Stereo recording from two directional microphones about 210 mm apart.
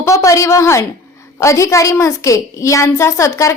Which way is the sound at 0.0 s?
15° left (ahead or behind).